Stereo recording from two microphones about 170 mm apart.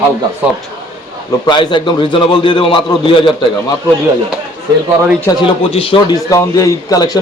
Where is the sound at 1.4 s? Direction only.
25° left (ahead or behind).